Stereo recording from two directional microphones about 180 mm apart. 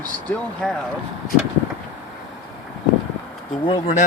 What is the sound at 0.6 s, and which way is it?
Speech, centre (ahead or behind).